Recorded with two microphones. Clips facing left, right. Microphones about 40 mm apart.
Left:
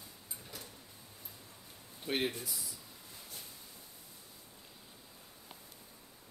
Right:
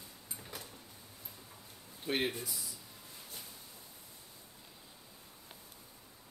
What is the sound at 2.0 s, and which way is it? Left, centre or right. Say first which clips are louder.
Speech: right 1 dB; centre.